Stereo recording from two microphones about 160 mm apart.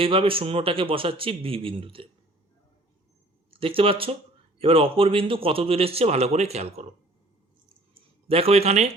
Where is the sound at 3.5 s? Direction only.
35° right (ahead or behind).